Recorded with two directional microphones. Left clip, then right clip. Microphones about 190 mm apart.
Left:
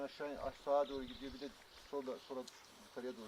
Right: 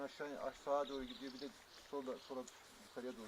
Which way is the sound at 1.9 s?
5° left (ahead or behind).